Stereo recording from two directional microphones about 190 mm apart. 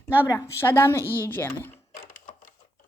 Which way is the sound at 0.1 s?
10° left (ahead or behind).